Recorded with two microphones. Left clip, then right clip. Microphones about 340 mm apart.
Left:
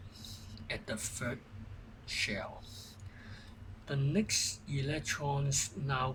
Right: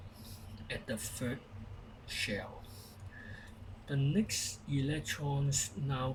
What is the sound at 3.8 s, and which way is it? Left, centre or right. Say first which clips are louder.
A man's voice: left 1 dB; left.